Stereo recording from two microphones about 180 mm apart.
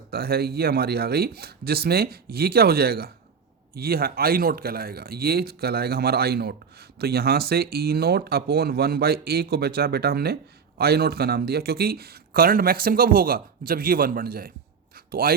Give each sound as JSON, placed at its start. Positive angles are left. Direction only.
{"t": 0.1, "sound": "speech", "side_deg": -60}